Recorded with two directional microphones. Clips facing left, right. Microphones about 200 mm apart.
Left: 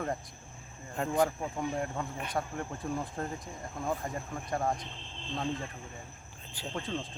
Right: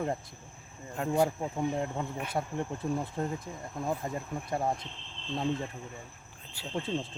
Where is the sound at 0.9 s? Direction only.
10° right (ahead or behind).